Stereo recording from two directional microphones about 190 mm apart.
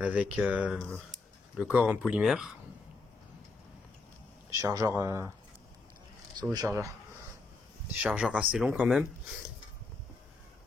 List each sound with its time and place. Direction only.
0.0 s speech: 5° right (ahead or behind)
4.5 s speech: 15° right (ahead or behind)
6.5 s speech: 20° right (ahead or behind)